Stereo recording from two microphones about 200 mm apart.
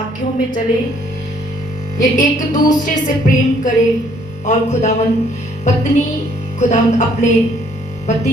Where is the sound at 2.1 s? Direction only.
40° left (ahead or behind).